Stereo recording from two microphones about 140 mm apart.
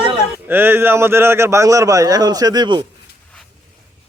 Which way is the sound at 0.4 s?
15° right (ahead or behind).